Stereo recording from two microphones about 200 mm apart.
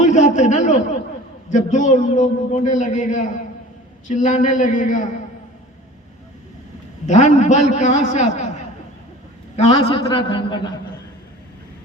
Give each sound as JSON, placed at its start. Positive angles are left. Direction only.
{"t": 0.0, "sound": "a man's voice", "side_deg": 35}
{"t": 7.0, "sound": "a man's voice", "side_deg": 35}
{"t": 9.7, "sound": "a man's voice", "side_deg": 20}